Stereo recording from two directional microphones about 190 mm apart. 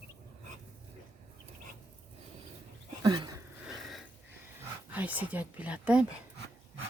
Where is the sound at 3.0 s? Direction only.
20° right (ahead or behind).